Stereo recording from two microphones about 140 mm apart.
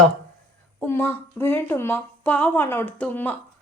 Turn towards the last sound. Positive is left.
turn(degrees=10)  # may be behind; listen again after turning